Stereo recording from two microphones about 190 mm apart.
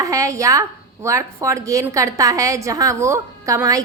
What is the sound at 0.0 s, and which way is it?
A woman's voice, 15° right (ahead or behind).